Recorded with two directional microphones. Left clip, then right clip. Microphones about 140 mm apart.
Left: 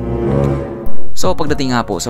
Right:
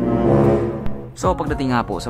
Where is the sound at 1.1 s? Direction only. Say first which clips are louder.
Left 4 dB; 40° left (ahead or behind).